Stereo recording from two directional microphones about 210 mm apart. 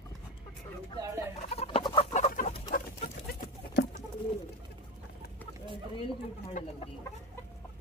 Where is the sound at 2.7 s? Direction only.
45° left (ahead or behind).